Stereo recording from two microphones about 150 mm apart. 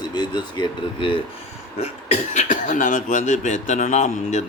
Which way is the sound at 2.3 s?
55° left (ahead or behind).